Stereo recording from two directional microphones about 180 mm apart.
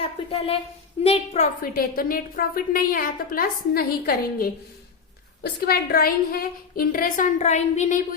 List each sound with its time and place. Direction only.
0.0 s speech: 30° left (ahead or behind)
1.6 s a woman's voice: 55° left (ahead or behind)